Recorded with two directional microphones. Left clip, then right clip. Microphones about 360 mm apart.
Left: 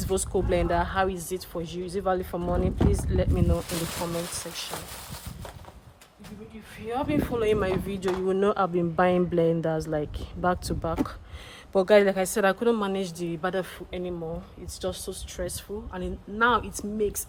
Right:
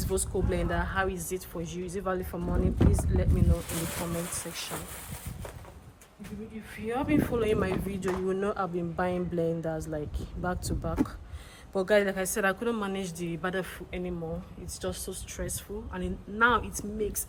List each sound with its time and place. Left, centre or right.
0.1 s speech: centre
6.7 s speech: centre